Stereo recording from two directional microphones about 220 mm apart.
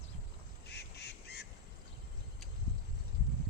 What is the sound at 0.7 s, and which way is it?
Duck, 50° left (ahead or behind).